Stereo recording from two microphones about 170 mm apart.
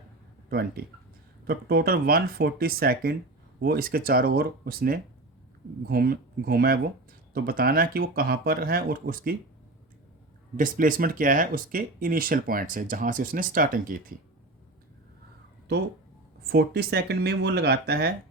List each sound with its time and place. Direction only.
1.5 s speech: 65° right (ahead or behind)
10.6 s speech: 55° right (ahead or behind)
15.7 s speech: 70° right (ahead or behind)